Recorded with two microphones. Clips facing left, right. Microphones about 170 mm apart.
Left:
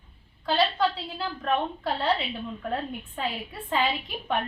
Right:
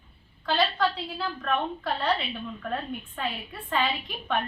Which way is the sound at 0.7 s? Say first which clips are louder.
Left 1 dB; 25° left (ahead or behind).